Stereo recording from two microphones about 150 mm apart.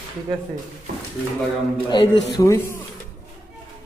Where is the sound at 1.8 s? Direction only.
30° left (ahead or behind).